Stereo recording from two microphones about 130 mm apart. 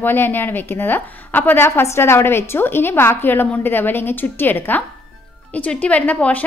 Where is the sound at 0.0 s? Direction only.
15° left (ahead or behind).